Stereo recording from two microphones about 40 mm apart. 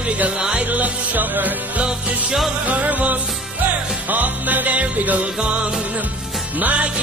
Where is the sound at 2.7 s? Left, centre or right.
Right.